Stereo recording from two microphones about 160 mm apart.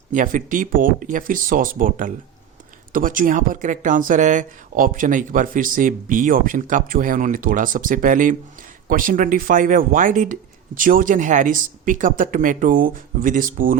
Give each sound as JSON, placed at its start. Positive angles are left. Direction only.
{"t": 0.1, "sound": "speech", "side_deg": -55}